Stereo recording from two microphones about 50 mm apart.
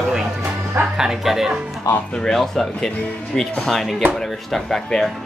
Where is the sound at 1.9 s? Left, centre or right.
Left.